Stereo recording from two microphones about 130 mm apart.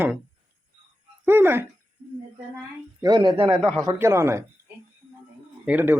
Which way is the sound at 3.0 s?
35° right (ahead or behind).